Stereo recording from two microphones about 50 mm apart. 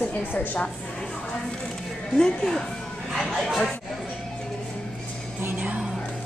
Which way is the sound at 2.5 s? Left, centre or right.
Centre.